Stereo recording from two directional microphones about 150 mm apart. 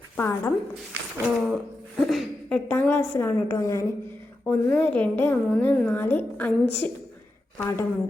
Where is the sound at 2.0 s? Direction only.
Centre (ahead or behind).